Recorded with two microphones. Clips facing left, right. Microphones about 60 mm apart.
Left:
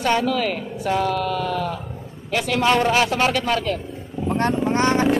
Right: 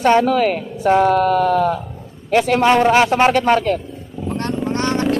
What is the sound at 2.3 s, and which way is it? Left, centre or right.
A man's voice, right.